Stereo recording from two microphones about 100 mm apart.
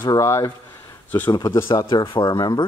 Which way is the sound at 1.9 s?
45° left (ahead or behind).